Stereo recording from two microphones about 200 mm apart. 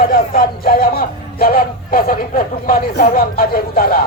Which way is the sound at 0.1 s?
45° left (ahead or behind).